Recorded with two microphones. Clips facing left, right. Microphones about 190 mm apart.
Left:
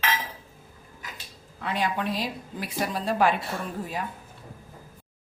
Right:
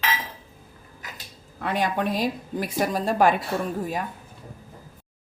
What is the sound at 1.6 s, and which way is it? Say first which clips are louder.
Speech: right 3 dB; 50° right (ahead or behind).